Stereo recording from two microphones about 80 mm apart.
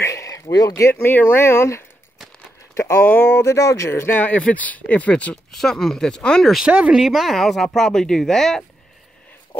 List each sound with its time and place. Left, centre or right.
0.0 s a sound: left
0.9 s speech: left
3.5 s speech: left; by 6.5 s centre
6.7 s speech: centre